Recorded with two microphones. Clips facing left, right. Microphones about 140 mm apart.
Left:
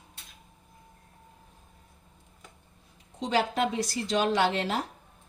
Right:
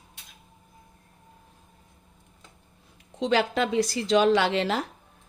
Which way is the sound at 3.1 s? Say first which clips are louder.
Right 3 dB; 85° right.